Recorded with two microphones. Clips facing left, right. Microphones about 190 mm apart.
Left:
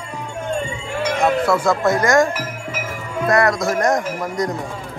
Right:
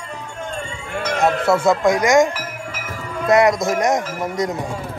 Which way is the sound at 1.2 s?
25° right (ahead or behind).